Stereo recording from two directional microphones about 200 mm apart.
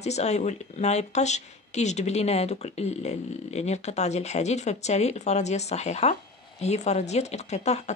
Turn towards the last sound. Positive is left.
turn(degrees=35)  # may be behind; listen again after turning